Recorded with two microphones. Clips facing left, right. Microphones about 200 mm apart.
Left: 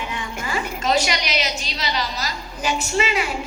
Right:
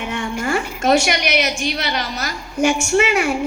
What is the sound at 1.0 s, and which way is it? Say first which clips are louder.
A woman's voice: right 5 dB; 55° right (ahead or behind).